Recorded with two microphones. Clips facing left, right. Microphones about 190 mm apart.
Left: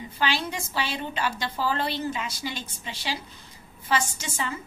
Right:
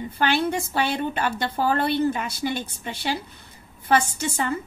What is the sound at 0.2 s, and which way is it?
A woman's voice, 55° right (ahead or behind).